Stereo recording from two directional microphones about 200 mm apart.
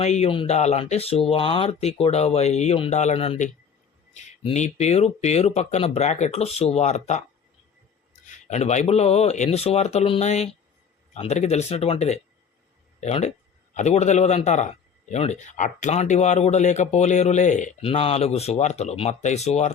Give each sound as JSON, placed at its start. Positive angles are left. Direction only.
{"t": 0.0, "sound": "a man's voice", "side_deg": 30}
{"t": 8.4, "sound": "a man's voice", "side_deg": 35}